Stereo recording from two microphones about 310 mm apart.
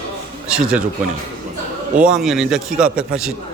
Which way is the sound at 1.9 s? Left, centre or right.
Centre.